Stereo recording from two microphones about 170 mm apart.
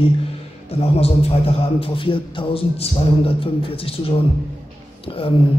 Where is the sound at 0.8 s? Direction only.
35° left (ahead or behind).